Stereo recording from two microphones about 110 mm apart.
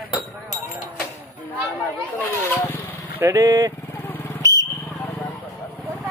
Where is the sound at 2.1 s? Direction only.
20° left (ahead or behind).